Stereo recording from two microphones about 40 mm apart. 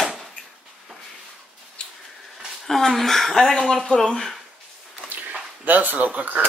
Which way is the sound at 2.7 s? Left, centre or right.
Centre.